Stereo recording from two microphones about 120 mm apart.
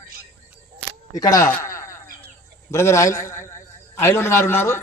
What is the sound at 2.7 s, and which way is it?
A man's voice, 25° left (ahead or behind).